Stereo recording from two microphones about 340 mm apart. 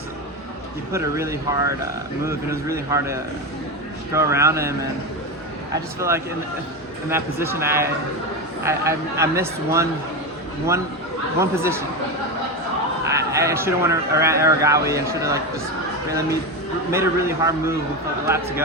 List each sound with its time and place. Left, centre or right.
0.9 s speech: centre
4.1 s speech: centre
5.7 s speech: centre
11.3 s speech: centre
13.1 s speech: centre
16.9 s speech: centre